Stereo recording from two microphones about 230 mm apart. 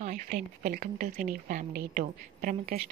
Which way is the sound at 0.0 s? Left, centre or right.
Right.